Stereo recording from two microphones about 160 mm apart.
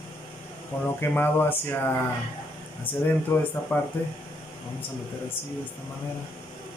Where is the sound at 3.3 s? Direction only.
10° left (ahead or behind).